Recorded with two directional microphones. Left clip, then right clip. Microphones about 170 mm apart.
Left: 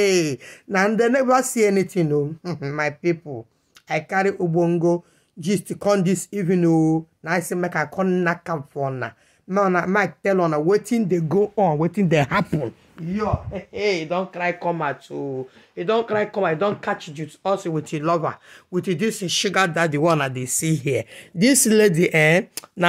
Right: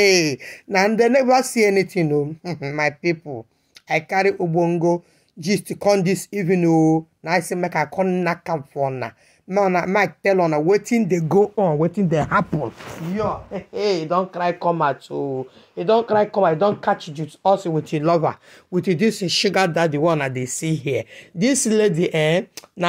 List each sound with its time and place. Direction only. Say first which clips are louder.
0.0 s speech: right 3 dB; 5° right (ahead or behind)
11.5 s speech: right 1 dB; 15° left (ahead or behind)
12.1 s speech: left 1 dB; 50° left (ahead or behind)
13.7 s speech: right 2 dB; 5° right (ahead or behind)
17.9 s speech: right 3 dB; 10° right (ahead or behind)
19.9 s speech: even; 25° left (ahead or behind)
20.2 s speech: right 1 dB; 10° left (ahead or behind)
20.6 s speech: even; 30° left (ahead or behind)